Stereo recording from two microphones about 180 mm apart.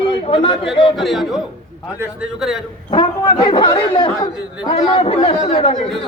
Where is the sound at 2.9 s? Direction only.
25° left (ahead or behind).